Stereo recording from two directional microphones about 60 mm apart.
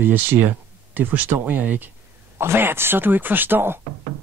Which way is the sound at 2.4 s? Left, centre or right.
Right.